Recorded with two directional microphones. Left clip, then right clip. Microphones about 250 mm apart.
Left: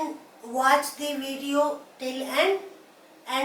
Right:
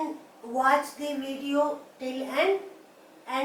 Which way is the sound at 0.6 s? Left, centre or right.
Centre.